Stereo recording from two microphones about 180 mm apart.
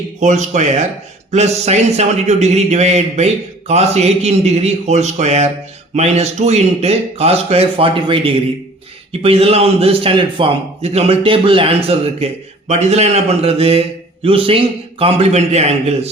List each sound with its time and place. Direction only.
0.2 s a man's voice: 40° right (ahead or behind)